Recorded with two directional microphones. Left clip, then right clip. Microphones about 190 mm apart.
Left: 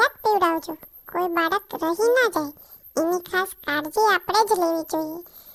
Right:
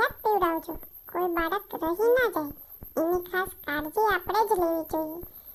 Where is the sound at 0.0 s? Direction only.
60° left (ahead or behind).